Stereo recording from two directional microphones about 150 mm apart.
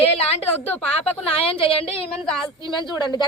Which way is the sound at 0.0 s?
40° left (ahead or behind).